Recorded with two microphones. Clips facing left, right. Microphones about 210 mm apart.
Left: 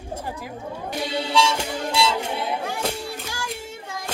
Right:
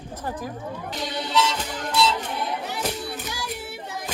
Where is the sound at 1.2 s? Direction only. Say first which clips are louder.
Left 1 dB; 10° left (ahead or behind).